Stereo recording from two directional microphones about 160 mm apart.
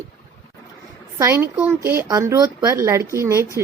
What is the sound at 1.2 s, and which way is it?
A woman's voice, 15° right (ahead or behind).